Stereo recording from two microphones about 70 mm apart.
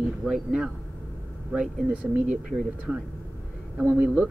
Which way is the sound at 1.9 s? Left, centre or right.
Centre.